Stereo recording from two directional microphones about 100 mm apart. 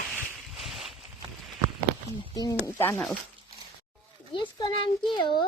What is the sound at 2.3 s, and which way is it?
Speech, 35° left (ahead or behind).